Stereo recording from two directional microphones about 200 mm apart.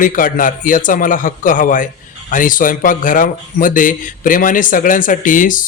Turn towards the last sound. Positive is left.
turn(degrees=40)  # may be behind; listen again after turning